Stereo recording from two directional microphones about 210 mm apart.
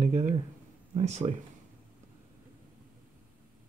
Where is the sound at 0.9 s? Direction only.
30° right (ahead or behind).